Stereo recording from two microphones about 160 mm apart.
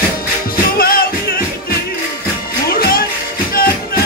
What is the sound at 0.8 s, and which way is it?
Music, 65° left (ahead or behind).